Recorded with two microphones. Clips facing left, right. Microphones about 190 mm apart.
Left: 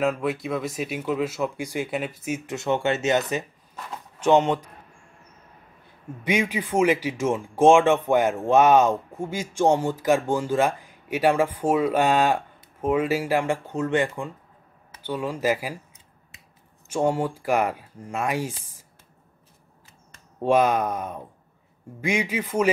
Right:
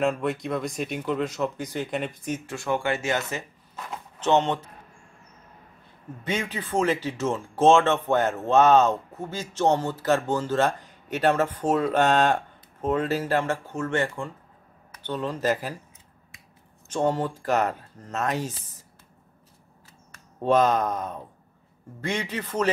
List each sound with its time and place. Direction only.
0.0 s speech: 5° left (ahead or behind)
2.5 s speech: 20° left (ahead or behind)
6.2 s speech: 10° left (ahead or behind)
16.9 s speech: 10° left (ahead or behind)
20.3 s speech: 10° left (ahead or behind)